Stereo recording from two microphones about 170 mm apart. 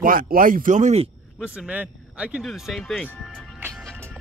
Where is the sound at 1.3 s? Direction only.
5° right (ahead or behind).